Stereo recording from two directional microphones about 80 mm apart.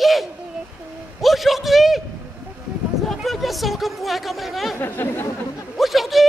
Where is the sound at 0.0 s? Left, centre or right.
Centre.